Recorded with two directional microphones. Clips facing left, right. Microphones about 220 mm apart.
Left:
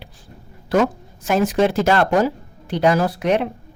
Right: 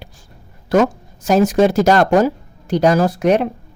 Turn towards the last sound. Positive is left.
turn(degrees=-40)  # may be behind; listen again after turning